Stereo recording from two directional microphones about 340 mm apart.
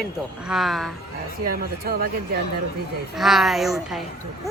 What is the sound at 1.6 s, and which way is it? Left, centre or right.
Speech, right.